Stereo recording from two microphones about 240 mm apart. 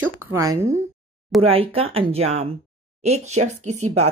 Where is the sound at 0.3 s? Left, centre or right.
Centre.